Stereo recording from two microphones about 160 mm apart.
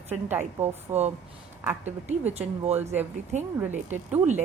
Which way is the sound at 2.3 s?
40° right (ahead or behind).